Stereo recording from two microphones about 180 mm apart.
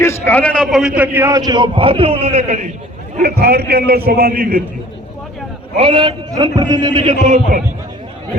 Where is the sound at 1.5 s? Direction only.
25° right (ahead or behind).